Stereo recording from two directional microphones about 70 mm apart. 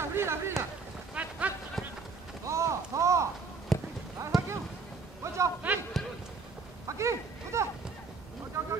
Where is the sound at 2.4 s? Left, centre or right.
Right.